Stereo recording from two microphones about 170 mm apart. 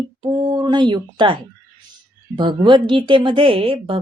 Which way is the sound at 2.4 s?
30° right (ahead or behind).